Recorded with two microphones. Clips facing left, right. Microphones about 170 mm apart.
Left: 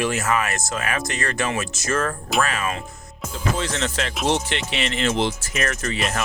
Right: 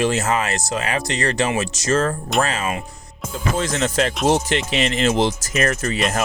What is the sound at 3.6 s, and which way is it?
Speech, 40° right (ahead or behind).